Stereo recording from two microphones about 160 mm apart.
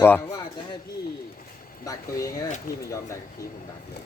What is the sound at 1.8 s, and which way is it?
Speech, 20° left (ahead or behind).